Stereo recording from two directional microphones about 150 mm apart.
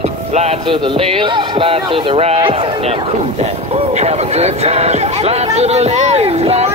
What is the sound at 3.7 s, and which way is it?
Speech, 45° right (ahead or behind).